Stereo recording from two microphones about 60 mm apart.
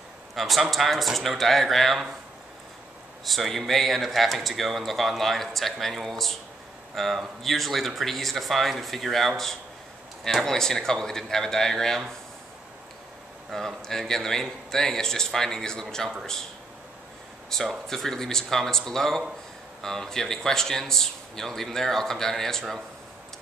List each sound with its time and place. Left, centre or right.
0.4 s speech: centre
3.3 s speech: centre
13.5 s speech: centre
17.5 s speech: centre